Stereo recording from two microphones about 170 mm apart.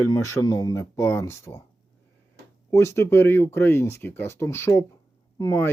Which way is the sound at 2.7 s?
15° left (ahead or behind).